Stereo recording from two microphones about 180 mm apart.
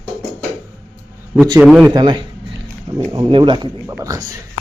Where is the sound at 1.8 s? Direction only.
25° right (ahead or behind).